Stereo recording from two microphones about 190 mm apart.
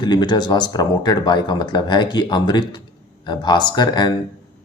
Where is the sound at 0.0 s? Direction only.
20° left (ahead or behind).